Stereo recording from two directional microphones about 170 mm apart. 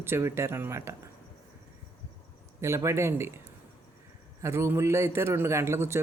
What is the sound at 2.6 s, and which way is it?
Speech, 15° right (ahead or behind).